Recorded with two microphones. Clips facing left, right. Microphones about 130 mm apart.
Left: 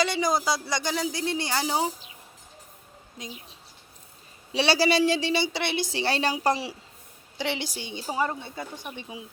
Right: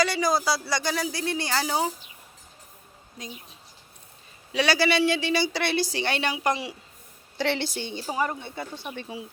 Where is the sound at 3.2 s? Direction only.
25° left (ahead or behind).